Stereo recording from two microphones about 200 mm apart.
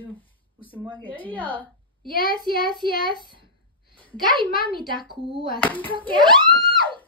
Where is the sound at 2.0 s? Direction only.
45° left (ahead or behind).